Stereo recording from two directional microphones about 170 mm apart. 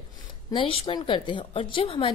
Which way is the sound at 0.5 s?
30° left (ahead or behind).